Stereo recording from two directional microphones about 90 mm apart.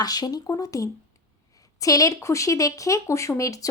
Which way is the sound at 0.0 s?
45° left (ahead or behind).